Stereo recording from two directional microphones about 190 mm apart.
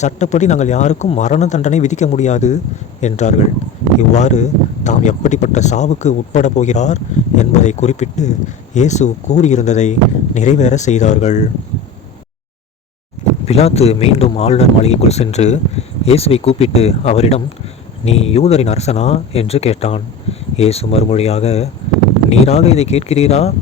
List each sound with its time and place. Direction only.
0.0 s speech: 40° left (ahead or behind)
13.5 s speech: 35° left (ahead or behind)